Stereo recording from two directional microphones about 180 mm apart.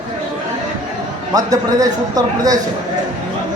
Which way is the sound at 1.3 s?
20° right (ahead or behind).